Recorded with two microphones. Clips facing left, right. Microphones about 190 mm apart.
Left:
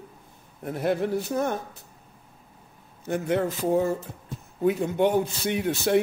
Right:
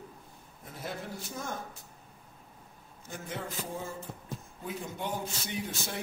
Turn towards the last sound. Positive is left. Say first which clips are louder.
# left 13 dB
turn(degrees=65)  # may be behind; listen again after turning